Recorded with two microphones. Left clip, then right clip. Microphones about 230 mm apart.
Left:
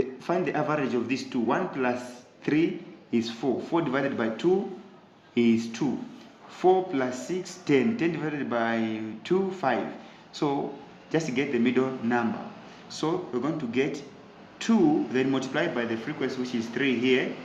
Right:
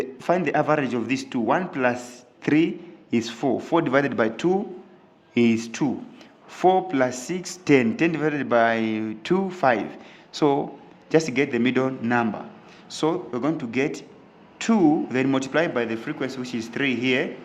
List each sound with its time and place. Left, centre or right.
0.0 s a man's voice: right